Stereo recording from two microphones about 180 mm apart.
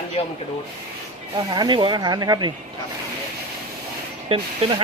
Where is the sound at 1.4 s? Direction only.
25° right (ahead or behind).